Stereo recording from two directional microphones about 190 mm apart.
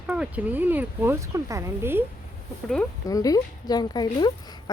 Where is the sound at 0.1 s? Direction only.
5° right (ahead or behind).